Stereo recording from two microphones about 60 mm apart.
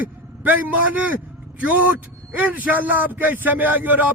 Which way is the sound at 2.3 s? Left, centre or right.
Right.